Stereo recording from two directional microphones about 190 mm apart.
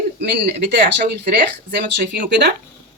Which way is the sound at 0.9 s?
55° right (ahead or behind).